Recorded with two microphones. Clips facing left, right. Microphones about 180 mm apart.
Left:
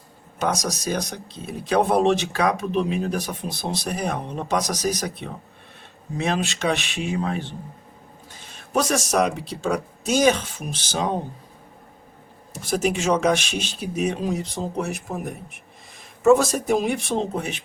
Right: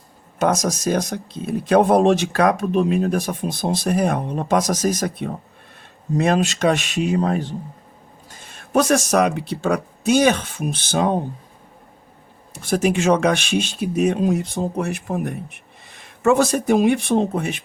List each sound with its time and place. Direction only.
0.3 s speech: 50° right (ahead or behind)
8.4 s speech: 55° right (ahead or behind)
12.5 s speech: 60° right (ahead or behind)